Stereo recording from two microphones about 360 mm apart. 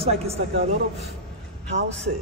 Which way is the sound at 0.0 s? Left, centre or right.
Centre.